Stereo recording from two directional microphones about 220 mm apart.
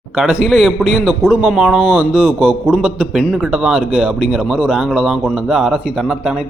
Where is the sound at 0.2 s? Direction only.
5° right (ahead or behind).